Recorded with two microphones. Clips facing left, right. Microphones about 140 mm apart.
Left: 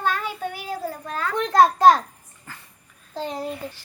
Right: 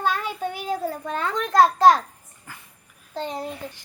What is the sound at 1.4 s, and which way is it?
Speech, 15° left (ahead or behind).